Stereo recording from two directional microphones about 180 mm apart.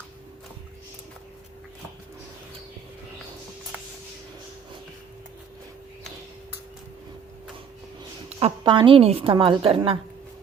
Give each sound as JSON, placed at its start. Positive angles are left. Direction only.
{"t": 8.4, "sound": "a woman's voice", "side_deg": -30}